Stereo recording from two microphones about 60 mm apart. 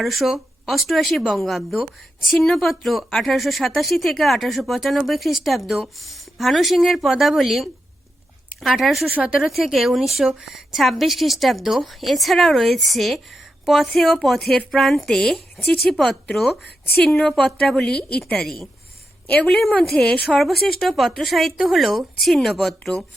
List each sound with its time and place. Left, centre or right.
0.0 s speech: centre
9.1 s speech: centre
9.7 s a woman's voice: centre